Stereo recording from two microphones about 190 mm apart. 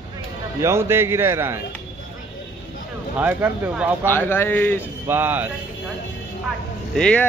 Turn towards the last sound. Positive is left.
turn(degrees=5)  # may be behind; listen again after turning